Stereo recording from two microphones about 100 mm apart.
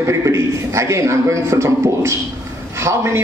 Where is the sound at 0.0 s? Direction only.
30° right (ahead or behind).